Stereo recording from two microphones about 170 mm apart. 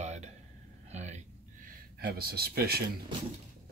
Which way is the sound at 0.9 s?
40° right (ahead or behind).